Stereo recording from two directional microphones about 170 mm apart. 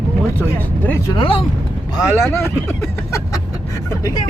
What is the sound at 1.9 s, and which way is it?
Speech, 15° left (ahead or behind).